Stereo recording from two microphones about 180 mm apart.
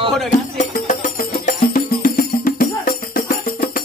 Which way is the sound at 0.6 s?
45° left (ahead or behind).